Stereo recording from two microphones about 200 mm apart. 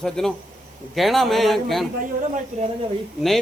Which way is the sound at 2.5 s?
35° right (ahead or behind).